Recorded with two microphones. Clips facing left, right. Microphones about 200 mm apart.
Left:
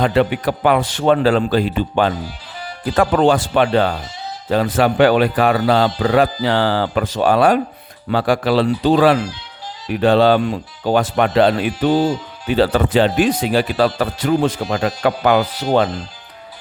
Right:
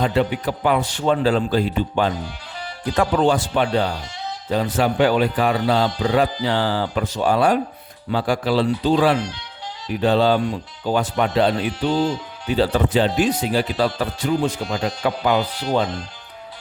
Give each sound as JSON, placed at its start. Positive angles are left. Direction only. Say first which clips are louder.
{"t": 0.0, "sound": "a man's voice", "louder": "left 4 dB", "side_deg": 75}
{"t": 2.8, "sound": "a man's voice", "louder": "left 4 dB", "side_deg": 60}
{"t": 4.4, "sound": "a man's voice", "louder": "left 4 dB", "side_deg": 90}
{"t": 9.9, "sound": "a man's voice", "louder": "left 4 dB", "side_deg": 75}
{"t": 12.5, "sound": "speech", "louder": "left 3 dB", "side_deg": 80}
{"t": 14.4, "sound": "speech", "louder": "left 4 dB", "side_deg": 60}